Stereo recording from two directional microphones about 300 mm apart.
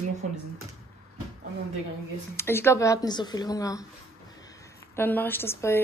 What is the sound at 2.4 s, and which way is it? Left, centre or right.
Speech, centre.